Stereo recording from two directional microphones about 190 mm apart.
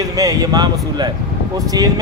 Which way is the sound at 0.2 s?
20° right (ahead or behind).